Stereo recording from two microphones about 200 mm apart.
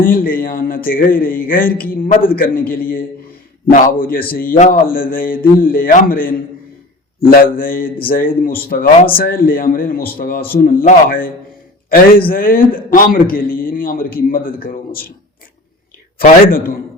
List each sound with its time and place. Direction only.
0.0 s a man's voice: 45° left (ahead or behind)
16.1 s a man's voice: 45° left (ahead or behind)